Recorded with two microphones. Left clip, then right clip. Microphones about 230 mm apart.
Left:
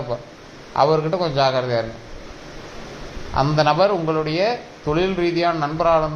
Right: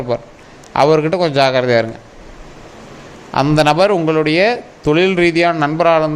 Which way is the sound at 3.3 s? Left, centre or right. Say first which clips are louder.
Right 5 dB; right.